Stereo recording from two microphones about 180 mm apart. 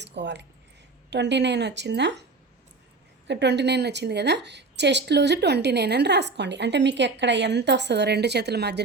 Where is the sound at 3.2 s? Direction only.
75° right (ahead or behind).